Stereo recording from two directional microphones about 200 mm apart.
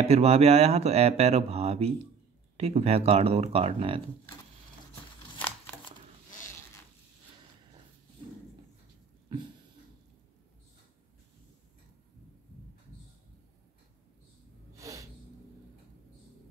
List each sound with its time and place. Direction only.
0.0 s speech: 30° right (ahead or behind)
14.7 s snort: 15° right (ahead or behind)